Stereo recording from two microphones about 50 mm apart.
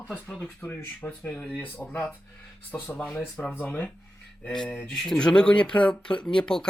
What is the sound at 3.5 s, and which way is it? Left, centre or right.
Speech, left.